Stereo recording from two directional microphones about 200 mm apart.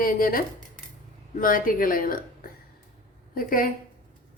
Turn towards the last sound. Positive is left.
turn(degrees=45)  # may be behind; listen again after turning